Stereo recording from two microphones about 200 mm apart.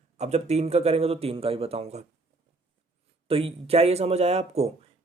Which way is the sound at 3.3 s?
25° right (ahead or behind).